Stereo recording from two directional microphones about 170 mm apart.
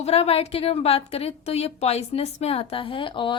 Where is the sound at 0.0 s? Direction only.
35° left (ahead or behind).